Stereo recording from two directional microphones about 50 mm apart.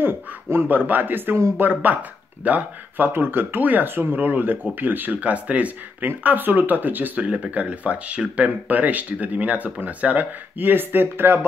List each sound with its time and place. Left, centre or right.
0.0 s speech: right
3.1 s speech: right
6.0 s speech: right